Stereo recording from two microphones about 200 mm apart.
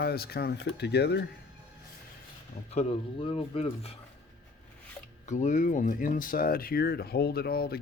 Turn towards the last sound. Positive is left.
turn(degrees=50)  # may be behind; listen again after turning